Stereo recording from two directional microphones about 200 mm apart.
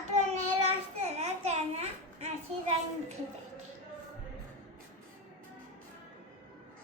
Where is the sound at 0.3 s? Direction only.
35° right (ahead or behind).